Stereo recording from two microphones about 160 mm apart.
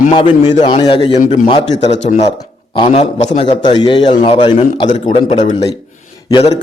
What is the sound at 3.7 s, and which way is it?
Speech, 30° left (ahead or behind).